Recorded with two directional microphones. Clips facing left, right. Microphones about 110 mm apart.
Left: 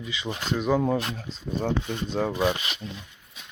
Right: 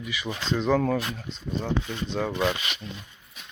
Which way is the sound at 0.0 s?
25° left (ahead or behind).